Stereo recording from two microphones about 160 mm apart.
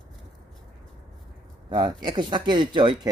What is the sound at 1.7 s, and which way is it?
Speech, 25° right (ahead or behind).